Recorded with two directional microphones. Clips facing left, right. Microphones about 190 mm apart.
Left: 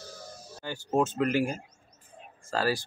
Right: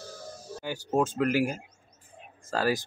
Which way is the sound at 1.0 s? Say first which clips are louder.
Right 1 dB; 10° right (ahead or behind).